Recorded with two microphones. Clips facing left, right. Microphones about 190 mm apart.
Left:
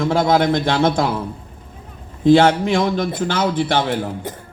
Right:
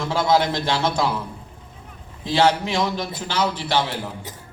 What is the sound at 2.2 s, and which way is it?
A man's voice, 55° left (ahead or behind).